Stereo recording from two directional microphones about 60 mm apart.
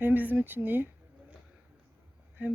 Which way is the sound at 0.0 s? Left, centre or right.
Right.